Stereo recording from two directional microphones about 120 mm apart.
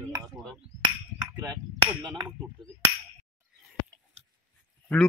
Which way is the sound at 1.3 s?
35° right (ahead or behind).